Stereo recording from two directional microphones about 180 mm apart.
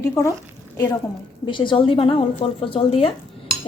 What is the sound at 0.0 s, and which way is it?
Speech, 15° left (ahead or behind).